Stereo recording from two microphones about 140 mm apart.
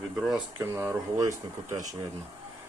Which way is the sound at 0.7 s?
15° right (ahead or behind).